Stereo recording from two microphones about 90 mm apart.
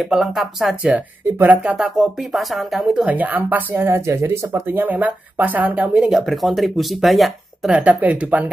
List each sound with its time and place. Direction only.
0.0 s speech: centre (ahead or behind)
0.8 s speech: 15° right (ahead or behind)
1.8 s speech: 5° right (ahead or behind)
3.0 s speech: 20° right (ahead or behind)
6.0 s speech: centre (ahead or behind)
7.7 s speech: 15° right (ahead or behind)